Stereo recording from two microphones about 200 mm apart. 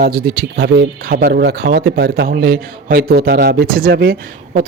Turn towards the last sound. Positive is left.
turn(degrees=-50)  # may be behind; listen again after turning